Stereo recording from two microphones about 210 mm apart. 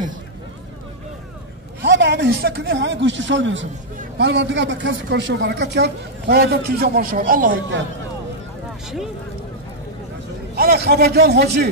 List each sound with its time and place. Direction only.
1.8 s a man's voice: 55° right (ahead or behind)
8.8 s speech: centre (ahead or behind)
10.5 s a woman's voice: 45° right (ahead or behind)